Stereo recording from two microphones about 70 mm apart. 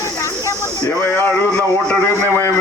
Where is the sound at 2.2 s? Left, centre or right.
Left.